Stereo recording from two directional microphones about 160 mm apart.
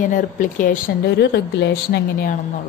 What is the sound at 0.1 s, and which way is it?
Speech, 55° left (ahead or behind).